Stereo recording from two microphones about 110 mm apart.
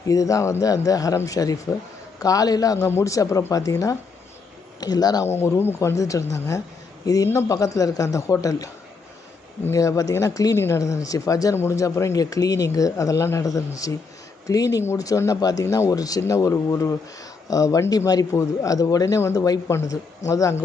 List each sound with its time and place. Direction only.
0.1 s speech: 30° left (ahead or behind)
5.4 s speech: 20° left (ahead or behind)
9.7 s speech: 30° left (ahead or behind)